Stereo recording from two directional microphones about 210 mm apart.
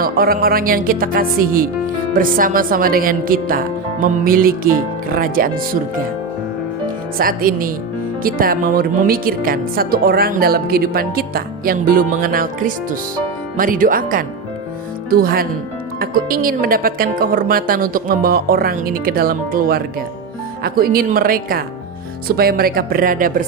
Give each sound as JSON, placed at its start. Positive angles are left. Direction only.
{"t": 0.0, "sound": "speech", "side_deg": -45}
{"t": 7.2, "sound": "speech", "side_deg": -40}